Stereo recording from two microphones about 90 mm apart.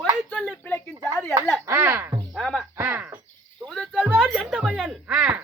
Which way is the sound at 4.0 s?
10° right (ahead or behind).